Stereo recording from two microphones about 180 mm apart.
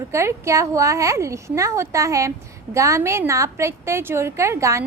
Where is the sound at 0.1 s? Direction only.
15° right (ahead or behind).